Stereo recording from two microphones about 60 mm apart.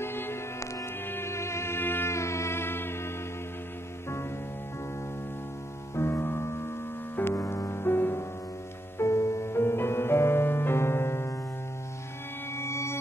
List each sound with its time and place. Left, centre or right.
0.0 s music: left
2.1 s music: left
5.9 s music: left
12.5 s music: left